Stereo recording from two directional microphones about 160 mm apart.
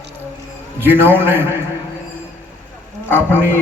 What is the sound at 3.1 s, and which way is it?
Speech, 15° right (ahead or behind).